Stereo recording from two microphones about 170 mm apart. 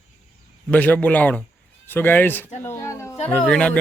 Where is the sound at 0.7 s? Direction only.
10° left (ahead or behind).